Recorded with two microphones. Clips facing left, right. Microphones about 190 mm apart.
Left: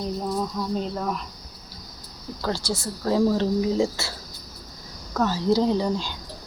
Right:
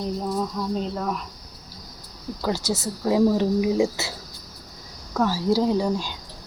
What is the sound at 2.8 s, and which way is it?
Speech, 10° right (ahead or behind).